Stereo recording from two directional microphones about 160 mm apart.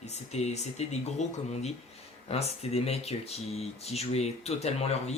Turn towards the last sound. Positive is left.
turn(degrees=40)  # may be behind; listen again after turning